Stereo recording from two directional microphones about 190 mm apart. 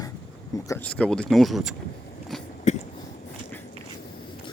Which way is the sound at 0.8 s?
5° left (ahead or behind).